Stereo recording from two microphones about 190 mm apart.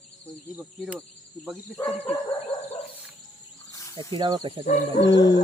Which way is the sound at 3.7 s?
15° left (ahead or behind).